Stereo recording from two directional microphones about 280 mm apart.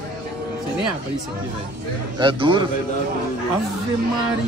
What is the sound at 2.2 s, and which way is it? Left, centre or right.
Speech, centre.